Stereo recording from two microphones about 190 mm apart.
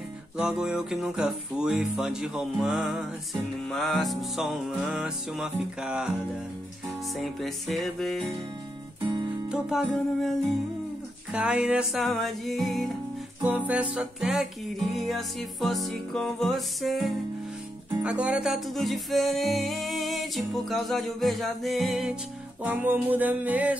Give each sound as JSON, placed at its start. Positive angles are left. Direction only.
{"t": 0.4, "sound": "music", "side_deg": -5}
{"t": 7.2, "sound": "music", "side_deg": 0}
{"t": 9.5, "sound": "music", "side_deg": 0}
{"t": 11.3, "sound": "music", "side_deg": -5}